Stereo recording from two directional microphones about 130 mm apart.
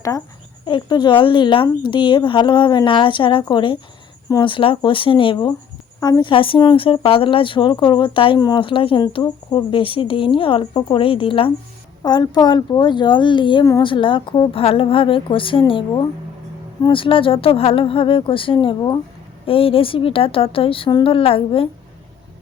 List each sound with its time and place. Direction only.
0.6 s speech: 35° left (ahead or behind)
8.4 s speech: 30° left (ahead or behind)
8.6 s speech: 40° left (ahead or behind)
12.0 s a woman's voice: 30° left (ahead or behind)